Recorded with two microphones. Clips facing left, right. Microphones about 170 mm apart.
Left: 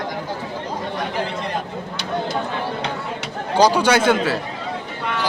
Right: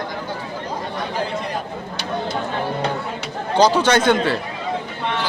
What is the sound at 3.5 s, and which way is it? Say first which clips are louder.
Speech: even; 10° left (ahead or behind).